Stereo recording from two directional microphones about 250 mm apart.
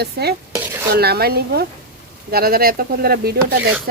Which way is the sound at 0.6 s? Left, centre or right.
Centre.